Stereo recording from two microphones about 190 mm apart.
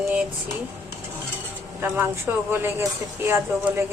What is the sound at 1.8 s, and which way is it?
A woman's voice, 10° right (ahead or behind).